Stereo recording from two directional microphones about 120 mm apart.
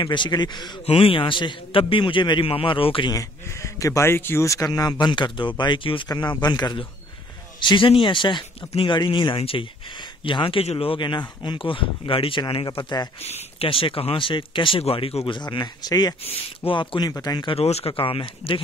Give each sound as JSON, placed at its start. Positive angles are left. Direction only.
{"t": 0.0, "sound": "speech", "side_deg": 40}
{"t": 0.8, "sound": "speech", "side_deg": 50}
{"t": 3.1, "sound": "speech", "side_deg": 25}
{"t": 13.2, "sound": "speech", "side_deg": 50}
{"t": 16.3, "sound": "speech", "side_deg": 45}
{"t": 17.1, "sound": "speech", "side_deg": 35}
{"t": 17.5, "sound": "speech", "side_deg": 60}